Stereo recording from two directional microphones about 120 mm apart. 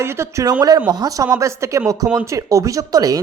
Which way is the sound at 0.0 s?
20° right (ahead or behind).